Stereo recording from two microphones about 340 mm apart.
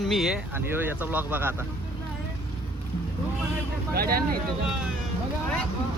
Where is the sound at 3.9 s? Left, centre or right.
Right.